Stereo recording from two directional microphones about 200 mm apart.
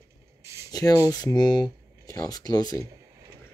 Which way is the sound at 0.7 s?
20° left (ahead or behind).